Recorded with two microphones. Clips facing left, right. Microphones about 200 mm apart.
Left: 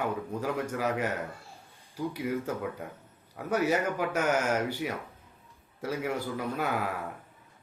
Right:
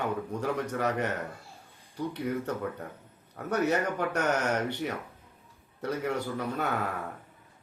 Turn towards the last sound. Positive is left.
turn(degrees=5)  # may be behind; listen again after turning